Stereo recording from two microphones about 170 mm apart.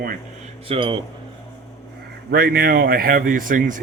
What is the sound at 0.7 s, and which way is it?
Speech, 30° right (ahead or behind).